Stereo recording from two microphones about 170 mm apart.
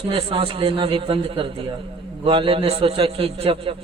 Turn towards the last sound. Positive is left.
turn(degrees=-30)  # may be behind; listen again after turning